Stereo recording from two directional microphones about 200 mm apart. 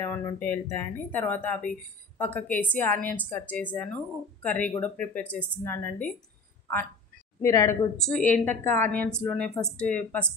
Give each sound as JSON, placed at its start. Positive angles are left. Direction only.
{"t": 0.0, "sound": "a woman's voice", "side_deg": 10}
{"t": 7.4, "sound": "a woman's voice", "side_deg": 15}